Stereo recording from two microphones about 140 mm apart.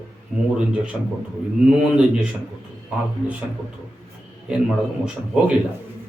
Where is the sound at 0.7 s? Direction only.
10° right (ahead or behind).